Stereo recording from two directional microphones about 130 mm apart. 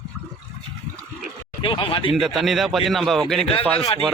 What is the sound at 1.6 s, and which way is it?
Speech, 40° left (ahead or behind).